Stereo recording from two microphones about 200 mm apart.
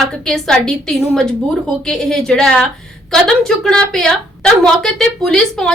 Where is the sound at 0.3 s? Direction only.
Centre (ahead or behind).